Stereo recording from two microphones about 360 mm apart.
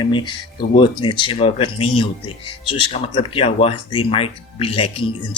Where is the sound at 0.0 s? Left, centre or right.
Centre.